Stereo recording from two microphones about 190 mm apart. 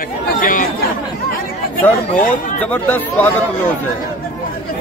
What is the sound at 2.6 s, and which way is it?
Speech, 10° left (ahead or behind).